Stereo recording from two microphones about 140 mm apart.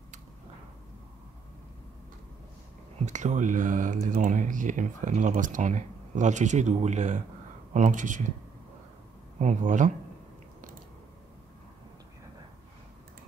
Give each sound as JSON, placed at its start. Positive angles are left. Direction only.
{"t": 3.1, "sound": "speech", "side_deg": -60}
{"t": 9.4, "sound": "speech", "side_deg": -60}